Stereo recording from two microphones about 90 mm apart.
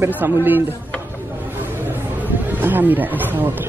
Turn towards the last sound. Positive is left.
turn(degrees=-20)  # may be behind; listen again after turning